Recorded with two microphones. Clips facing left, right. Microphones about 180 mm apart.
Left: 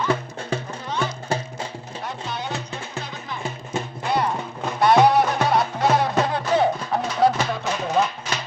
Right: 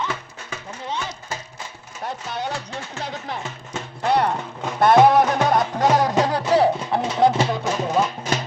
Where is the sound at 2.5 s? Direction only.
20° left (ahead or behind).